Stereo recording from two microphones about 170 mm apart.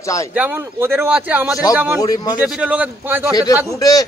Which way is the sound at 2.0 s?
20° left (ahead or behind).